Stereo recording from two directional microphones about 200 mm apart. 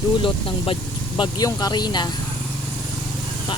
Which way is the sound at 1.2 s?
20° left (ahead or behind).